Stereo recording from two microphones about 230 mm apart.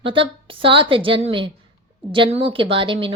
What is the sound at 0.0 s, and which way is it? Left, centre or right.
A woman's voice, right.